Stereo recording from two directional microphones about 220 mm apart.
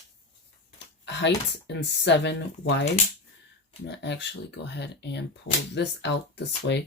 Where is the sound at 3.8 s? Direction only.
50° left (ahead or behind).